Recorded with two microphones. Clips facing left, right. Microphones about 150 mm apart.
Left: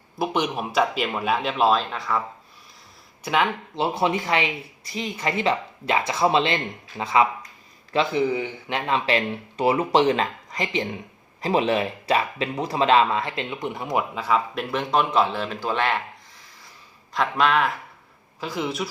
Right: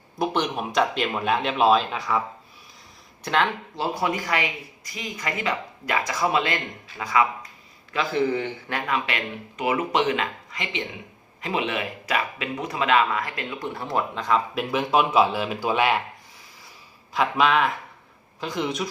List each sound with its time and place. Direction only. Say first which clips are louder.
0.2 s speech: even; 5° left (ahead or behind)
3.2 s a man's voice: left 1 dB; 10° left (ahead or behind)
3.8 s speech: left 3 dB; 25° left (ahead or behind)
8.3 s a man's voice: even; 10° left (ahead or behind)
8.7 s speech: left 5 dB; 30° left (ahead or behind); by 16.0 s 10° right (ahead or behind)
17.2 s speech: even; centre (ahead or behind)